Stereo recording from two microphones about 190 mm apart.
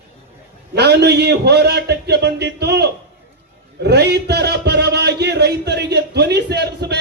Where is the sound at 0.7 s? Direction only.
60° right (ahead or behind).